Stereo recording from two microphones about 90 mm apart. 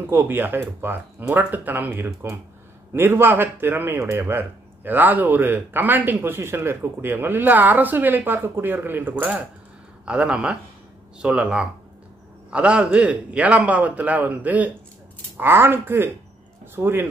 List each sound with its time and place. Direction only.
0.0 s a man's voice: 25° right (ahead or behind)